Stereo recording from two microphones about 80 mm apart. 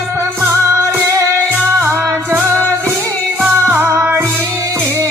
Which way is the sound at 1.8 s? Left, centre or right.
Right.